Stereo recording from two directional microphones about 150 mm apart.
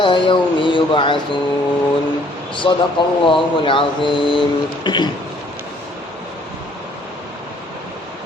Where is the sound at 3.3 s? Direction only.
35° left (ahead or behind).